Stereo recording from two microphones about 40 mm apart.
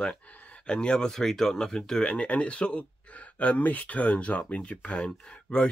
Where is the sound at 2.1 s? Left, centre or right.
Left.